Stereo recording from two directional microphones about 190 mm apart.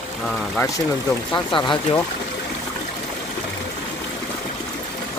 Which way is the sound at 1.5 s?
25° left (ahead or behind).